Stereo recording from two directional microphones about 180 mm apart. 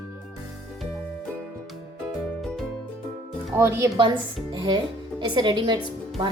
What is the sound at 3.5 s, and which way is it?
Speech, 15° right (ahead or behind).